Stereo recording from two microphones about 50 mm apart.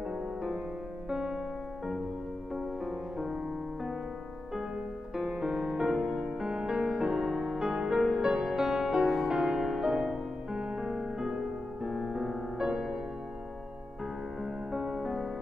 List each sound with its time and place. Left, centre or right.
0.1 s music: centre
2.5 s music: centre
5.1 s music: right
14.4 s music: centre